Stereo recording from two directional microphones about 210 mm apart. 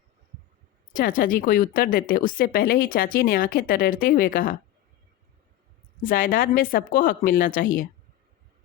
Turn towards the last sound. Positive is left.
turn(degrees=40)  # may be behind; listen again after turning